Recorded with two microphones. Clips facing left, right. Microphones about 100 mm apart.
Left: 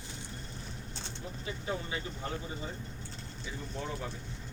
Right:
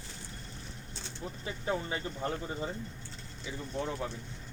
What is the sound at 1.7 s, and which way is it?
Speech, 35° right (ahead or behind).